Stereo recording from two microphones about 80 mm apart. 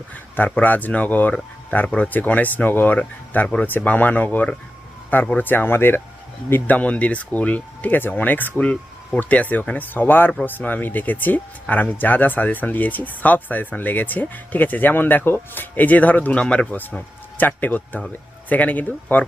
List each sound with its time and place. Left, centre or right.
0.1 s speech: left